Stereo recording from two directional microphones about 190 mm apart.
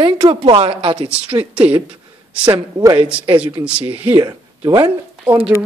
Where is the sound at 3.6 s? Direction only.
5° right (ahead or behind).